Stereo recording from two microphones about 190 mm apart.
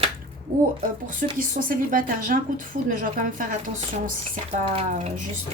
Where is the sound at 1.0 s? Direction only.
45° right (ahead or behind).